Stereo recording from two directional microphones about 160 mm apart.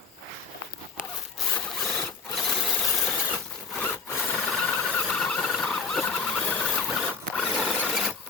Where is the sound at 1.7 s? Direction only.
Centre (ahead or behind).